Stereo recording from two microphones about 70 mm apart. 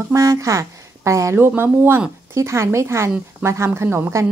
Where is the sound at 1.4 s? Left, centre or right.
Right.